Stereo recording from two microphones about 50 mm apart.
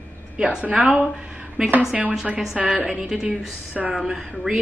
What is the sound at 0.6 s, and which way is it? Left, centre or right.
Speech, right.